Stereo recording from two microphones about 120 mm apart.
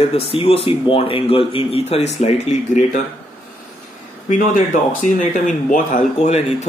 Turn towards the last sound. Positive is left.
turn(degrees=75)  # may be behind; listen again after turning